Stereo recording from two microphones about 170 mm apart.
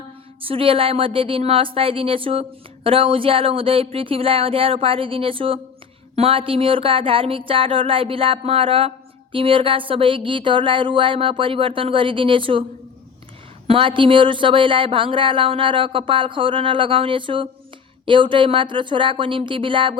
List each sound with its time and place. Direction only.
0.4 s speech: 35° right (ahead or behind)
13.7 s speech: 30° right (ahead or behind)